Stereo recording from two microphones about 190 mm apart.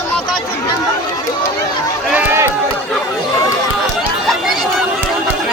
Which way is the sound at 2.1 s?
10° right (ahead or behind).